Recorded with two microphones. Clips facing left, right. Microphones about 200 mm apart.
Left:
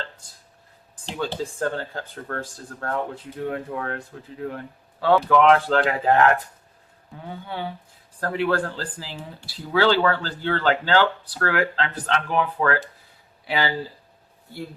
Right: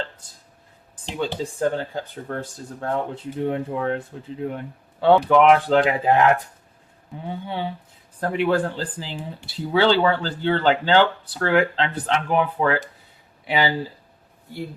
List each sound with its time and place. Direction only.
1.0 s speech: 15° right (ahead or behind)